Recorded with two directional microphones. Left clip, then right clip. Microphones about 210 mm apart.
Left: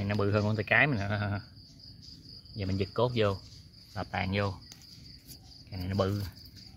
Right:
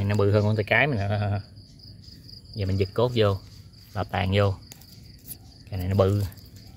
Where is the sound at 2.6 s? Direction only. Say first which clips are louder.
Right 5 dB; 10° right (ahead or behind).